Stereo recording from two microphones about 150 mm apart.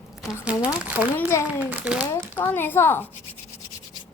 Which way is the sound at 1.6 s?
10° right (ahead or behind).